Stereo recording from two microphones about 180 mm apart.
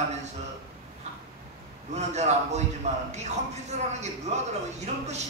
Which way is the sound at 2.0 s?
40° right (ahead or behind).